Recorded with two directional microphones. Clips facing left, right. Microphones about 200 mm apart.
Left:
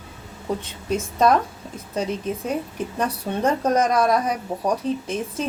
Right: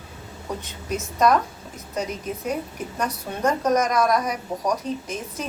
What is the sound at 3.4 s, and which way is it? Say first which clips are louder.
A woman's voice: left 1 dB; 30° left (ahead or behind).